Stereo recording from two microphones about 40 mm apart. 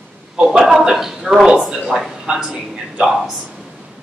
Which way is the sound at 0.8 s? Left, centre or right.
Centre.